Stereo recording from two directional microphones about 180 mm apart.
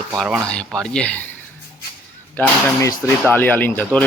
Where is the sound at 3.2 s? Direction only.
10° left (ahead or behind).